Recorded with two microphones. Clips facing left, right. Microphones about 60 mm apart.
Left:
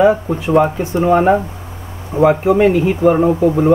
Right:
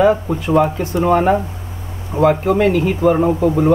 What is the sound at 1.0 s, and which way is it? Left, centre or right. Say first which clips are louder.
Speech: left 2 dB; centre.